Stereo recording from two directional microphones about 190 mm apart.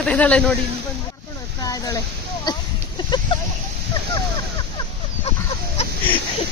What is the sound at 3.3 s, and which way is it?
Speech, 25° left (ahead or behind).